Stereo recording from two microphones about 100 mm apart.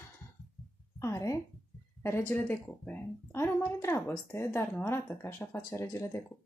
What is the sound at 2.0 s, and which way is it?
Speech, 20° left (ahead or behind).